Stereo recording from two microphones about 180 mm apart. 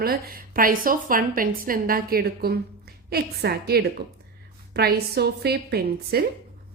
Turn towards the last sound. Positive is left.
turn(degrees=-60)  # may be behind; listen again after turning